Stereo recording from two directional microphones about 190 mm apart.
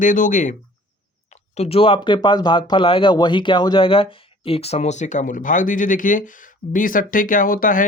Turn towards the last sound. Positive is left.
turn(degrees=45)  # may be behind; listen again after turning